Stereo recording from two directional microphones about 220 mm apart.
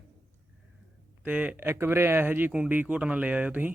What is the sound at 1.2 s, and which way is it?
Speech, 5° right (ahead or behind).